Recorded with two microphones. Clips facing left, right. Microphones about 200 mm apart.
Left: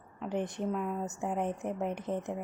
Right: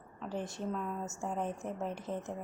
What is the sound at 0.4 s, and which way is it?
A woman's voice, 15° left (ahead or behind).